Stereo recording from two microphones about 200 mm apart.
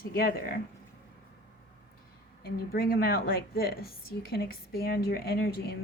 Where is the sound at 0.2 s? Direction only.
45° left (ahead or behind).